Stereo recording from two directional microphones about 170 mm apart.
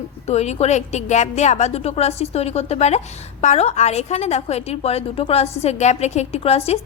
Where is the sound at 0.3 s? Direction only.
40° left (ahead or behind).